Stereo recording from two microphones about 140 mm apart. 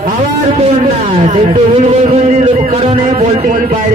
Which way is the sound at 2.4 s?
45° right (ahead or behind).